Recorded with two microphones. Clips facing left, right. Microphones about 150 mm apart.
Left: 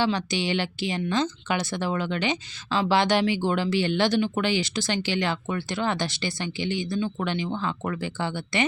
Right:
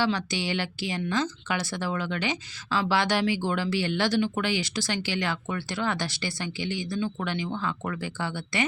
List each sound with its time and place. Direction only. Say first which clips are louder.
0.0 s speech: left 2 dB; 20° left (ahead or behind)